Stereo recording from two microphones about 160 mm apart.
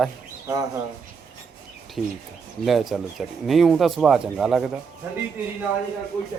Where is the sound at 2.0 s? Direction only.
Centre (ahead or behind).